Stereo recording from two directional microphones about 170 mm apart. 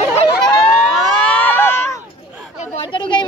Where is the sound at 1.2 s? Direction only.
10° left (ahead or behind).